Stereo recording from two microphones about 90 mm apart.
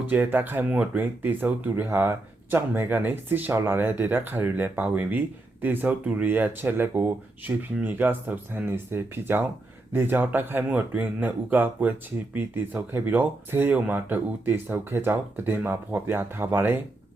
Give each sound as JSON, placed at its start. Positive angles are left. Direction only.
{"t": 0.0, "sound": "speech", "side_deg": -20}